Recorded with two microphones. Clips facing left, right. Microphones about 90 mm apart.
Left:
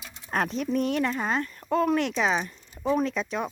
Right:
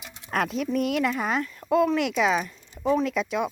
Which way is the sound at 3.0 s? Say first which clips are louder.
Right 2 dB; 35° left (ahead or behind).